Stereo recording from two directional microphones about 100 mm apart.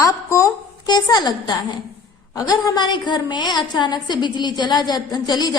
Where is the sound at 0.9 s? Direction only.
40° left (ahead or behind).